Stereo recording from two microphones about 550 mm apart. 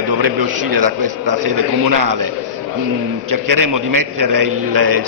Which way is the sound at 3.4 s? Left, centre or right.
Right.